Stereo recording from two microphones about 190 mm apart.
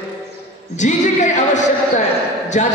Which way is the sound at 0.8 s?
40° left (ahead or behind).